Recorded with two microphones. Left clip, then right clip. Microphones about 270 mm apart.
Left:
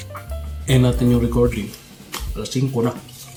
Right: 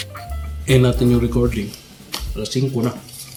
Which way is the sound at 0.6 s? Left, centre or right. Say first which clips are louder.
Right 3 dB; centre.